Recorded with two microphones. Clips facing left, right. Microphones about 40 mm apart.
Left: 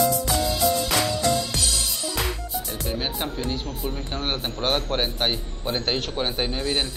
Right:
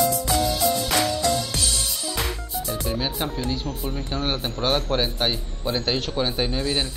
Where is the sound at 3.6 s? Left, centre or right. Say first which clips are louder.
Right 1 dB; centre.